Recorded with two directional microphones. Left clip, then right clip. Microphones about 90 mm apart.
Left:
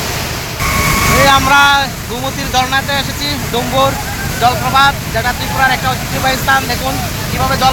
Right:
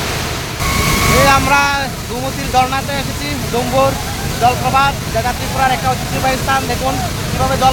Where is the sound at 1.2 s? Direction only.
Centre (ahead or behind).